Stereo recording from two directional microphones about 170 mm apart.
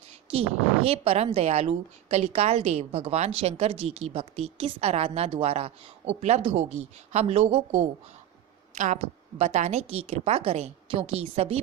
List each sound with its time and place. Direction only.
0.3 s speech: 35° right (ahead or behind)